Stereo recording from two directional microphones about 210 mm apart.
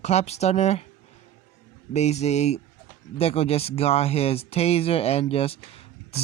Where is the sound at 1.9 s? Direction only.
30° left (ahead or behind).